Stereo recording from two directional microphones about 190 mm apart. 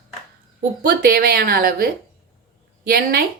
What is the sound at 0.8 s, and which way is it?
Speech, 50° right (ahead or behind).